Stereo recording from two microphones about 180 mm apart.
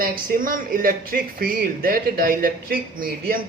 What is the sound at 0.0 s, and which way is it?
Speech, 55° right (ahead or behind).